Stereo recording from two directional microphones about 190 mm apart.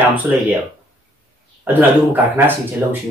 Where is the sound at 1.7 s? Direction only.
10° right (ahead or behind).